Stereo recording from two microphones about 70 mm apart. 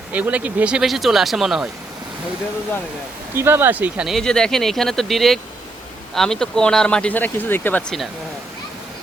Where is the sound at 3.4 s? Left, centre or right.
Right.